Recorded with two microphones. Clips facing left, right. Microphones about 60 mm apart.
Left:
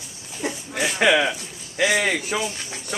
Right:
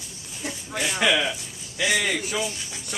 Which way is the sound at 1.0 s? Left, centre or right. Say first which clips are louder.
Left 4 dB; left.